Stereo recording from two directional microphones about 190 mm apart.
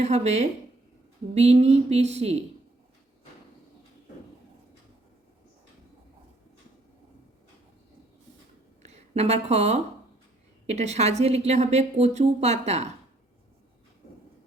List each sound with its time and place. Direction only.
0.0 s a woman's voice: 35° right (ahead or behind)
8.8 s a woman's voice: 35° right (ahead or behind)